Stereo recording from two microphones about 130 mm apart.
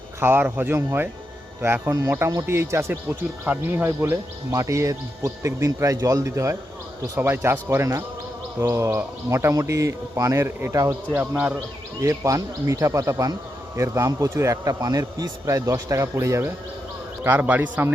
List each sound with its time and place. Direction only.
0.2 s speech: 15° right (ahead or behind)